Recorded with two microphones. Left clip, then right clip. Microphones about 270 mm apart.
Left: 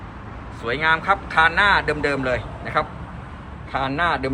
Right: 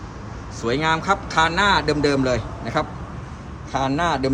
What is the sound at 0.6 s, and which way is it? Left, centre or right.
Speech, centre.